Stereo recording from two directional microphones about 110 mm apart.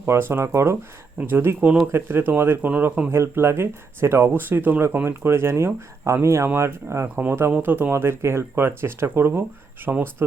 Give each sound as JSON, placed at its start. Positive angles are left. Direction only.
{"t": 0.0, "sound": "speech", "side_deg": -20}
{"t": 3.1, "sound": "speech", "side_deg": -20}